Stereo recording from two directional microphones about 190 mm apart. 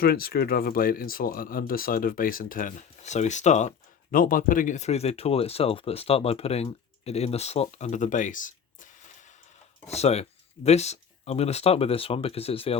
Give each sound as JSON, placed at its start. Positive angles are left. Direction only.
{"t": 0.0, "sound": "speech", "side_deg": 55}